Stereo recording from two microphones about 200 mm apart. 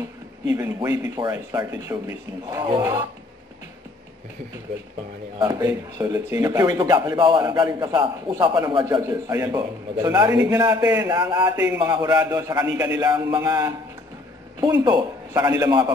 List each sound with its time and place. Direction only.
0.6 s a man's voice: 20° right (ahead or behind)
5.4 s a man's voice: 20° right (ahead or behind)